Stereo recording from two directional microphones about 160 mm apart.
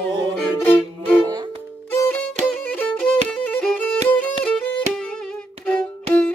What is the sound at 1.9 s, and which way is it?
Music, 10° left (ahead or behind).